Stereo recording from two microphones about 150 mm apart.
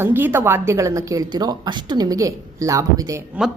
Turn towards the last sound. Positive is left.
turn(degrees=-20)  # may be behind; listen again after turning